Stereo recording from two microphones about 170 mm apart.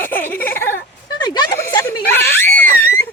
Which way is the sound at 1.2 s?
25° left (ahead or behind).